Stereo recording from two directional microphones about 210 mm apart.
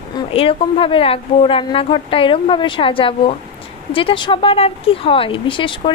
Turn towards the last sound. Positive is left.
turn(degrees=25)  # may be behind; listen again after turning